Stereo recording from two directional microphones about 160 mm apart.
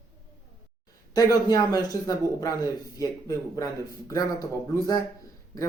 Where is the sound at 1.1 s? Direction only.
25° left (ahead or behind).